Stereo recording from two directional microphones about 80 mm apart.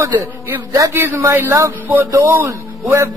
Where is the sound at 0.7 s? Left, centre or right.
Right.